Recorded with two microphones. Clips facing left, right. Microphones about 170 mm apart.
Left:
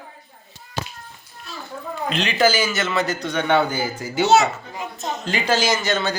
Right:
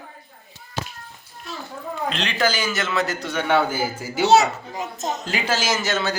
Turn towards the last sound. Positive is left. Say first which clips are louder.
# left 2 dB
turn(degrees=-5)  # may be behind; listen again after turning